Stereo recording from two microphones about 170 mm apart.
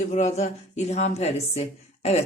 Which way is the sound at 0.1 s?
45° left (ahead or behind).